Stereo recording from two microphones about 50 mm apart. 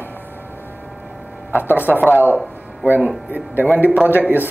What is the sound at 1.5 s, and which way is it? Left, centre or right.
Speech, right.